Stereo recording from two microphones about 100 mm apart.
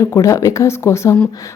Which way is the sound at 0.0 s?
30° left (ahead or behind).